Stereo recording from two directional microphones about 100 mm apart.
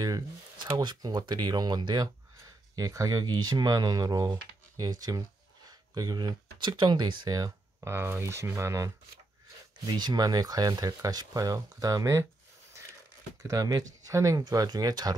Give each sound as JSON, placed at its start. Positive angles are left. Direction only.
{"t": 0.7, "sound": "speech", "side_deg": -45}
{"t": 2.7, "sound": "speech", "side_deg": -35}
{"t": 7.9, "sound": "speech", "side_deg": -25}
{"t": 9.8, "sound": "speech", "side_deg": -45}
{"t": 13.4, "sound": "speech", "side_deg": -35}